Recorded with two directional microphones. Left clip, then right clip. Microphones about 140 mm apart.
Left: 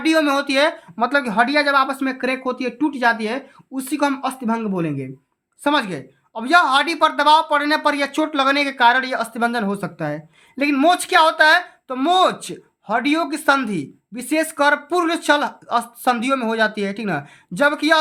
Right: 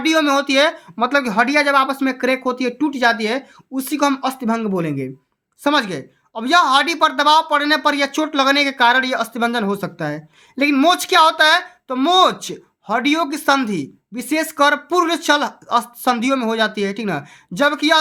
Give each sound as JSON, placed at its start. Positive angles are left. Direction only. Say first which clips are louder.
{"t": 0.0, "sound": "speech", "louder": "right 2 dB", "side_deg": -20}